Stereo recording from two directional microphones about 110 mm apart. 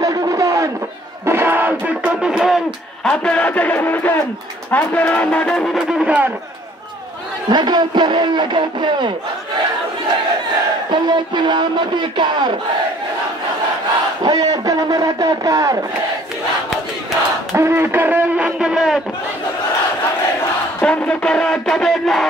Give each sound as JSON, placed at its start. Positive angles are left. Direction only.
{"t": 0.0, "sound": "a sound", "side_deg": -35}
{"t": 1.2, "sound": "music", "side_deg": -20}
{"t": 5.8, "sound": "a man's voice", "side_deg": -5}
{"t": 7.4, "sound": "a man's voice", "side_deg": -40}
{"t": 10.9, "sound": "a man's voice", "side_deg": -45}
{"t": 14.2, "sound": "a man's voice", "side_deg": -35}
{"t": 17.6, "sound": "a man's voice", "side_deg": -25}
{"t": 20.8, "sound": "music", "side_deg": 10}